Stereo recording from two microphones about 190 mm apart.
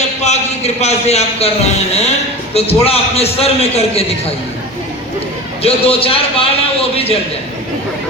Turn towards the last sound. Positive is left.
turn(degrees=30)  # may be behind; listen again after turning